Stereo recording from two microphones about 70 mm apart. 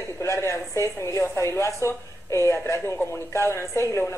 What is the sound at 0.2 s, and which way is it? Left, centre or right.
A woman's voice, left.